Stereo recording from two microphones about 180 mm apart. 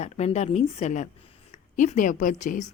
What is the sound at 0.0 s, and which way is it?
A woman's voice, 35° left (ahead or behind).